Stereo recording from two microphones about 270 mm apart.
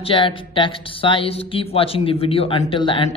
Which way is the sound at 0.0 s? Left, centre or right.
Centre.